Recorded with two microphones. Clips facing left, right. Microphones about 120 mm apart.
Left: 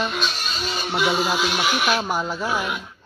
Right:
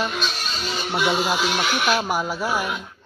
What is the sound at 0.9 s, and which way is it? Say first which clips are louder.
Speech: even; 5° right (ahead or behind).